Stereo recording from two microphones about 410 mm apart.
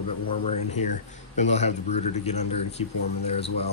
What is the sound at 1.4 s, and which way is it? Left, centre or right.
Speech, centre.